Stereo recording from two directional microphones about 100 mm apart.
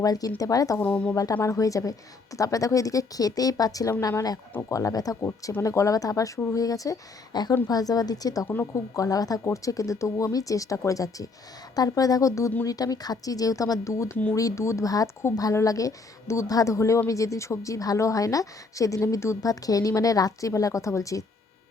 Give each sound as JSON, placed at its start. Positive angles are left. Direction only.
{"t": 0.0, "sound": "a woman's voice", "side_deg": 40}
{"t": 0.8, "sound": "speech", "side_deg": 15}
{"t": 1.1, "sound": "a woman's voice", "side_deg": 35}